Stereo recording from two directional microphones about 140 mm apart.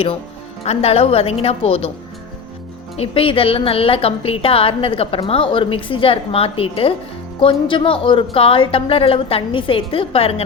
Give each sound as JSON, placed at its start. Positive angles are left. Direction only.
{"t": 0.6, "sound": "a woman's voice", "side_deg": 45}
{"t": 2.9, "sound": "a woman's voice", "side_deg": 45}